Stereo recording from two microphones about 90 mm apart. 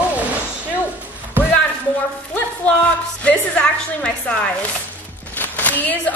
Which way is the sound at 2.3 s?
15° left (ahead or behind).